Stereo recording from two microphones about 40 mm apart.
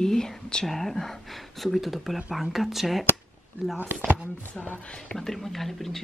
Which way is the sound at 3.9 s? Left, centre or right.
Right.